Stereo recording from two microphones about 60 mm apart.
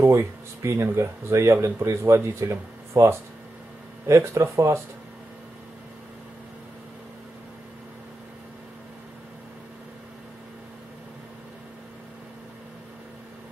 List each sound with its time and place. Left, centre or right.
0.0 s speech: right